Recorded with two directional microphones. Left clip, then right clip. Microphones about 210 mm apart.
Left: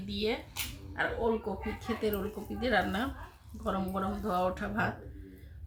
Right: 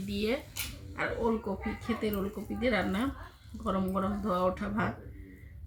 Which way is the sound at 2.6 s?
15° left (ahead or behind).